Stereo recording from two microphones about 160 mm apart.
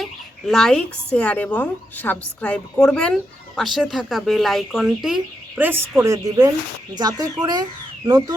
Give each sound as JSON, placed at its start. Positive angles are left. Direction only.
{"t": 0.0, "sound": "speech", "side_deg": 0}